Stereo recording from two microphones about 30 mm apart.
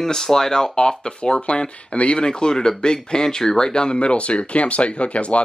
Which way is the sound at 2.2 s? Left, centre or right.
Left.